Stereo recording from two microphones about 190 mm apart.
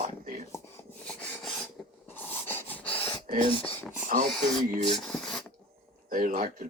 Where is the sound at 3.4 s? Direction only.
30° left (ahead or behind).